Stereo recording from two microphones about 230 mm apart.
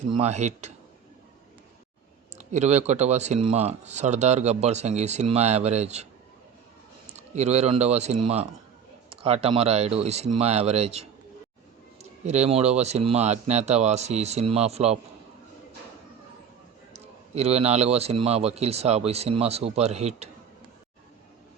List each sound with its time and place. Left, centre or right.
0.1 s speech: right
2.3 s speech: right
7.1 s speech: right
12.2 s speech: right
16.9 s speech: right